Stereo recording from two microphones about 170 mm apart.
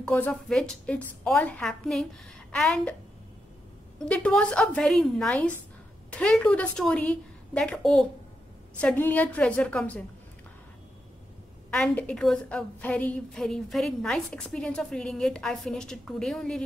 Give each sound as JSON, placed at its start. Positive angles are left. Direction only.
{"t": 0.0, "sound": "a woman's voice", "side_deg": 10}
{"t": 4.0, "sound": "a woman's voice", "side_deg": 5}
{"t": 11.7, "sound": "a woman's voice", "side_deg": 5}